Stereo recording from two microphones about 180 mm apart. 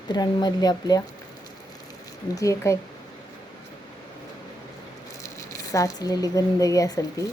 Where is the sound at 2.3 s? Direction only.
15° left (ahead or behind).